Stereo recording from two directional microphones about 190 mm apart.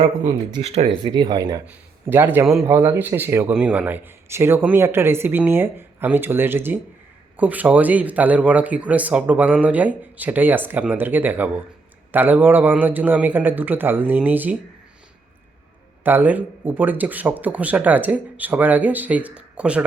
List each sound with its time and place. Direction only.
0.0 s speech: 25° right (ahead or behind); by 14.6 s 10° right (ahead or behind)
16.0 s speech: 10° right (ahead or behind)